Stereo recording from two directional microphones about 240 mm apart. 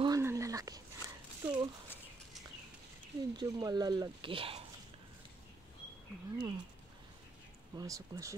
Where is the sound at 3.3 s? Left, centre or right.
Centre.